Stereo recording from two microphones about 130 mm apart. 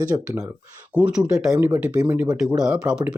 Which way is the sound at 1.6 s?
15° right (ahead or behind).